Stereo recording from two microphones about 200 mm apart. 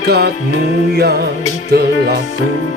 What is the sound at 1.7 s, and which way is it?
Music, 50° right (ahead or behind).